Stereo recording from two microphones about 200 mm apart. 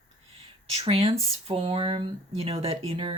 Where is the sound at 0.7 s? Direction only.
30° right (ahead or behind).